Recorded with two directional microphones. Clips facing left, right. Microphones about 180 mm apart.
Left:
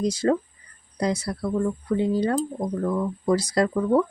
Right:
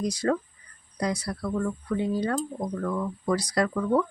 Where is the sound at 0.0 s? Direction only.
25° left (ahead or behind).